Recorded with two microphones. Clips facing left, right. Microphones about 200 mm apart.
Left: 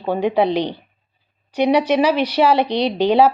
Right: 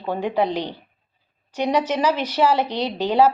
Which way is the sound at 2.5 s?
70° left (ahead or behind).